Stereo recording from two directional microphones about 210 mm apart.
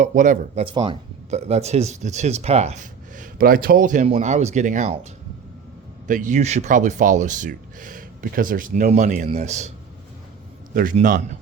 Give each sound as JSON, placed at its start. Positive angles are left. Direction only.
{"t": 0.0, "sound": "speech", "side_deg": -35}
{"t": 6.1, "sound": "speech", "side_deg": -40}
{"t": 10.8, "sound": "speech", "side_deg": -40}